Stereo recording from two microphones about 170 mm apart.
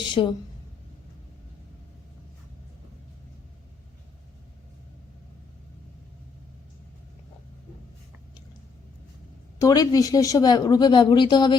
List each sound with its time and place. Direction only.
0.1 s a woman's voice: 30° left (ahead or behind)
9.6 s speech: 20° left (ahead or behind)